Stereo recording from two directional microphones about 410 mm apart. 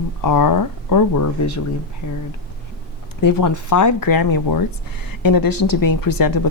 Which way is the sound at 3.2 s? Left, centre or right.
Left.